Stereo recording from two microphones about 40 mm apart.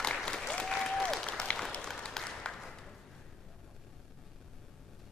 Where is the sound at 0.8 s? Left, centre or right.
Centre.